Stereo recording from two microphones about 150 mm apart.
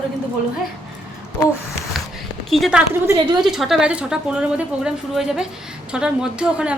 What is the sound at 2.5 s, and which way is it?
A woman's voice, centre (ahead or behind).